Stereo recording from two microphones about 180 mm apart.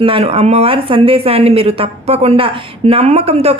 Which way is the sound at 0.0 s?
30° right (ahead or behind).